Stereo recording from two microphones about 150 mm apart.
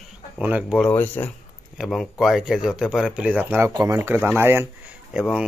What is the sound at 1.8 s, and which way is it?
Speech, centre (ahead or behind).